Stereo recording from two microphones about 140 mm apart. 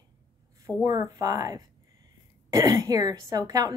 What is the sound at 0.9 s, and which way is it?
A woman's voice, 25° right (ahead or behind).